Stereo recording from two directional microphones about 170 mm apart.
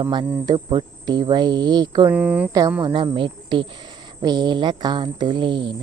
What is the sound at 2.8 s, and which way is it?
Speech, 25° right (ahead or behind).